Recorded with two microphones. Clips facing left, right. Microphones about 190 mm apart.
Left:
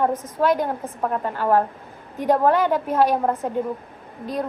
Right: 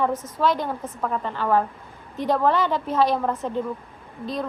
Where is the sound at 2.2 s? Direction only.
10° left (ahead or behind).